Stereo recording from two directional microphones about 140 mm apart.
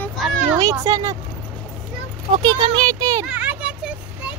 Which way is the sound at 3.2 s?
10° right (ahead or behind).